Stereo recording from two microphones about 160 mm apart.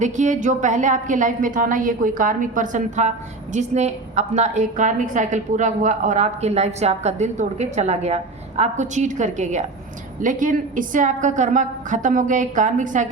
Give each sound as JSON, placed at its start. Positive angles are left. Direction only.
{"t": 0.0, "sound": "a woman's voice", "side_deg": -50}